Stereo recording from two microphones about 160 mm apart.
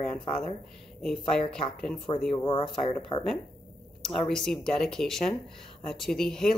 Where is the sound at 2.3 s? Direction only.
35° left (ahead or behind).